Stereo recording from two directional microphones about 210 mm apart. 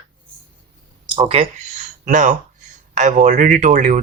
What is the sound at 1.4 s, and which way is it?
Speech, 30° right (ahead or behind).